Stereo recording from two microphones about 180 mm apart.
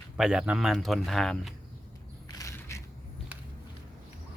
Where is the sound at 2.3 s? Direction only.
20° left (ahead or behind).